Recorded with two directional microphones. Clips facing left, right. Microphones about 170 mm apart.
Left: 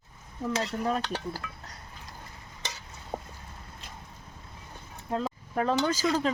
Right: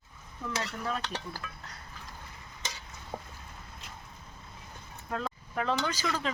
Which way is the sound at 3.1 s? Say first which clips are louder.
Left 4 dB; 25° left (ahead or behind).